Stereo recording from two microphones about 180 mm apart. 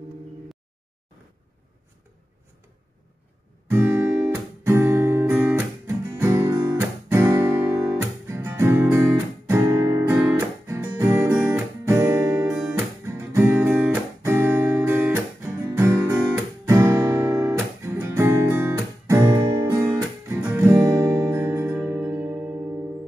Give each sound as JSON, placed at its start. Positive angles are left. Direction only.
{"t": 3.6, "sound": "guitar", "side_deg": -15}
{"t": 20.2, "sound": "music", "side_deg": -15}